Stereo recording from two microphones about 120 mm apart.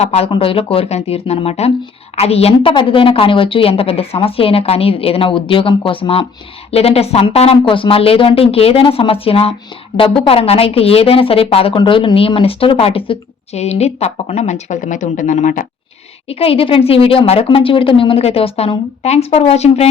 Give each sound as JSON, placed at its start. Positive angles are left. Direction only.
{"t": 0.0, "sound": "a woman's voice", "side_deg": 65}
{"t": 0.3, "sound": "a woman's voice", "side_deg": 50}
{"t": 7.5, "sound": "a woman's voice", "side_deg": 45}
{"t": 16.3, "sound": "a woman's voice", "side_deg": 55}